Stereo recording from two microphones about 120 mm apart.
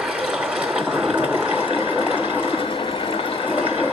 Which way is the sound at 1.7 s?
50° left (ahead or behind).